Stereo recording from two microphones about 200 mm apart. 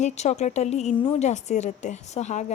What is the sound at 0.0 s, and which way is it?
A woman's voice, 35° left (ahead or behind).